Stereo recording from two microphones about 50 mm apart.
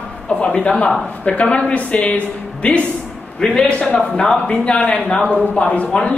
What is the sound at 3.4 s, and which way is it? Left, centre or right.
A woman's voice, centre.